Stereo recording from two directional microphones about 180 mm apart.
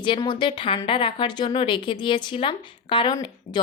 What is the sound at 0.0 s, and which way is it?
A woman's voice, 25° left (ahead or behind).